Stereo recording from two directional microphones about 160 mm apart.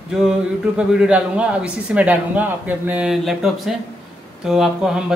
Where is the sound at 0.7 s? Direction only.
5° right (ahead or behind).